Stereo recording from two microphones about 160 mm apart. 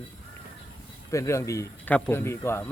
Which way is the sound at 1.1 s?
20° left (ahead or behind).